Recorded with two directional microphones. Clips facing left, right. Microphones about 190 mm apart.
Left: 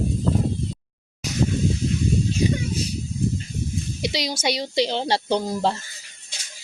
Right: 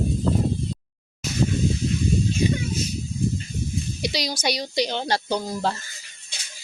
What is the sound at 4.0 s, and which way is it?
Speech, 25° left (ahead or behind).